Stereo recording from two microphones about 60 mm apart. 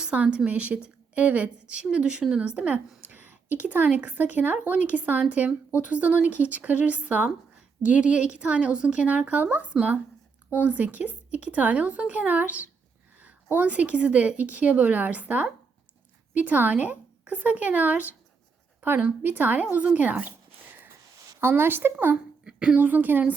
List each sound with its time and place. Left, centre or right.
0.0 s a woman's voice: centre
21.4 s speech: right
22.4 s a sound: centre
22.8 s a woman's voice: right